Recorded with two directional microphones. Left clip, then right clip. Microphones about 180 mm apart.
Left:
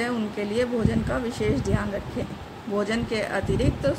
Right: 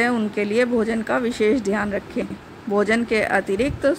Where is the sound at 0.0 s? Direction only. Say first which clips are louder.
Right 7 dB; 45° right (ahead or behind).